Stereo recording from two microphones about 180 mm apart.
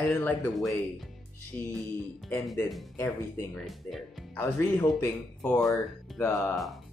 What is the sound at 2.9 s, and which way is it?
Speech, 15° left (ahead or behind).